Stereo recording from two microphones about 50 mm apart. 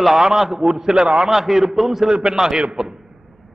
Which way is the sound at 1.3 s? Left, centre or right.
Centre.